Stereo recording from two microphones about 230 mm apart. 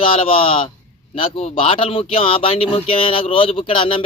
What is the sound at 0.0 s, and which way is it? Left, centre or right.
Speech, left.